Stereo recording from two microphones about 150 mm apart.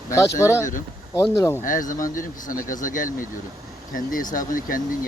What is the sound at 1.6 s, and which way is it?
Speech, 60° left (ahead or behind).